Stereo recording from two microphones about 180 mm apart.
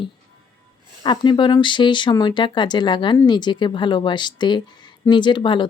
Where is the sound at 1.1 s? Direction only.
25° left (ahead or behind).